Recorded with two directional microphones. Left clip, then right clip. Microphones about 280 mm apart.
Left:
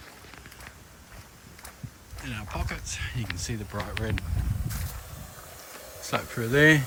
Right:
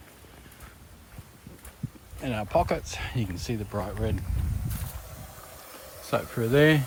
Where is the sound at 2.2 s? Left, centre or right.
Centre.